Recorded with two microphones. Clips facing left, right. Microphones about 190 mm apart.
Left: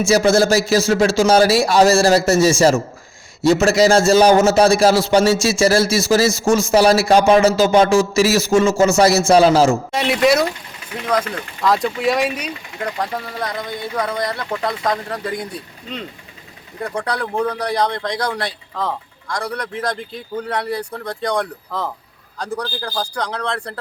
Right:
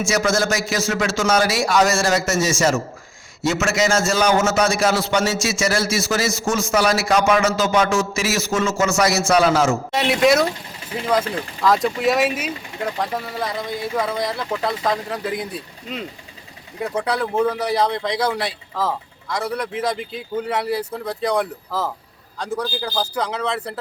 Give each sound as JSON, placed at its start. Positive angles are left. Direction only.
{"t": 0.1, "sound": "a man's voice", "side_deg": 30}
{"t": 9.9, "sound": "speech", "side_deg": 0}